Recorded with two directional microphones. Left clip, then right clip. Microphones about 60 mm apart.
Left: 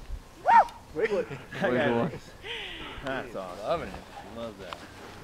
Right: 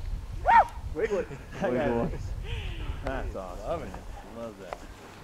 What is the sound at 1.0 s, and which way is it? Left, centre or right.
Speech, left.